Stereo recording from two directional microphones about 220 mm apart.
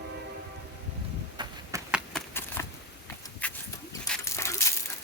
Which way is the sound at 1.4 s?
20° right (ahead or behind).